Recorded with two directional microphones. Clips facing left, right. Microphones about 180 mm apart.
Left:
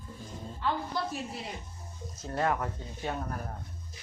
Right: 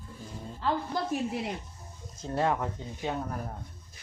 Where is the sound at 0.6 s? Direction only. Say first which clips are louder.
Right 2 dB; 45° right (ahead or behind).